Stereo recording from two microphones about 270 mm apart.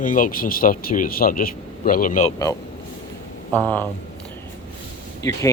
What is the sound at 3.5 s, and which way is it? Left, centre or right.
Speech, centre.